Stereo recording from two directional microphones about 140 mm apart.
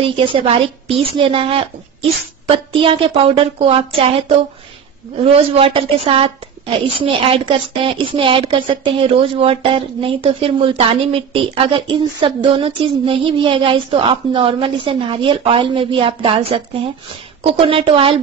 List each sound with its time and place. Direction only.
0.0 s a woman's voice: 40° right (ahead or behind)
5.1 s a woman's voice: 45° right (ahead or behind)